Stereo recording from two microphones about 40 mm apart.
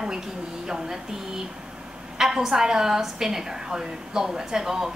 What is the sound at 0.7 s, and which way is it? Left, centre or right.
Speech, centre.